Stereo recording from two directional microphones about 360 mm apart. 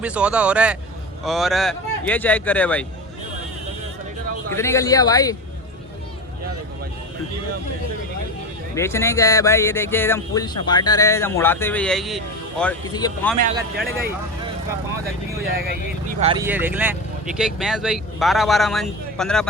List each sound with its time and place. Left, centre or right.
0.0 s speech: centre
4.5 s speech: centre
8.7 s speech: centre
13.4 s speech: right
16.2 s speech: centre